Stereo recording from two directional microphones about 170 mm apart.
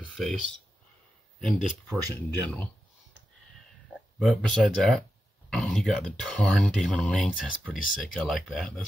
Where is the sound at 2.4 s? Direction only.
10° left (ahead or behind).